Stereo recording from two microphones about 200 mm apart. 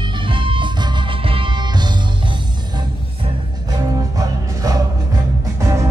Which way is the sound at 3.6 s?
20° right (ahead or behind).